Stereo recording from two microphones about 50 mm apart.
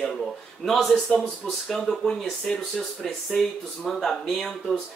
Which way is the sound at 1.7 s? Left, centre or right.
Centre.